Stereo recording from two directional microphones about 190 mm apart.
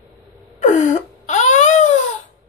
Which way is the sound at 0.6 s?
40° left (ahead or behind).